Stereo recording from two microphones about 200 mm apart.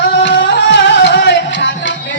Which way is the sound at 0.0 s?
60° left (ahead or behind).